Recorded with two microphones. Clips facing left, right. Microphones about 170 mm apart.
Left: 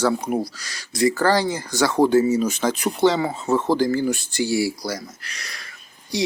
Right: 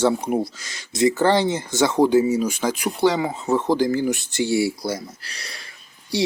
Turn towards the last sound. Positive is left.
turn(degrees=-30)  # may be behind; listen again after turning